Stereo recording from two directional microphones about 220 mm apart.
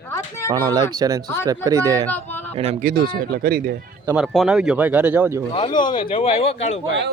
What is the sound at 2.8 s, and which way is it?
Speech, 45° right (ahead or behind).